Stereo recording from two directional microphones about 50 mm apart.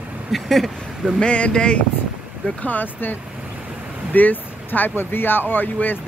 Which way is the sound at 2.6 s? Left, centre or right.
Left.